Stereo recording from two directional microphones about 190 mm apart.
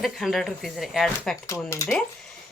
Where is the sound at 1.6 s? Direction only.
15° left (ahead or behind).